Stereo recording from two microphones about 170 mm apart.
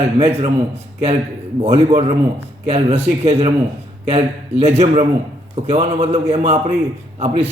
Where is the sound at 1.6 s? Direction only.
40° right (ahead or behind).